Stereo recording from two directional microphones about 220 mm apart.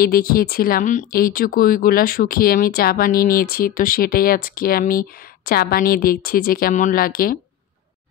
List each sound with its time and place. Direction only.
0.0 s speech: 45° left (ahead or behind)